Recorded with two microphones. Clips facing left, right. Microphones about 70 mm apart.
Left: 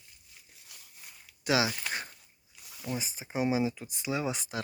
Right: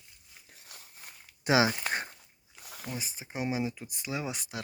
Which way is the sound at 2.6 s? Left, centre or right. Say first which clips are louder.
Right 4 dB; right.